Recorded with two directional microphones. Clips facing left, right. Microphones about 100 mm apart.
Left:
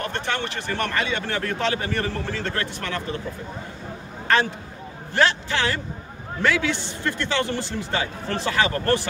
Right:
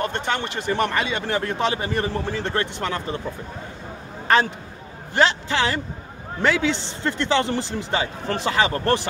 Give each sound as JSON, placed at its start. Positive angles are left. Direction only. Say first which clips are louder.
{"t": 0.0, "sound": "a man's voice", "louder": "right 2 dB", "side_deg": -20}
{"t": 5.1, "sound": "a man's voice", "louder": "right 1 dB", "side_deg": -20}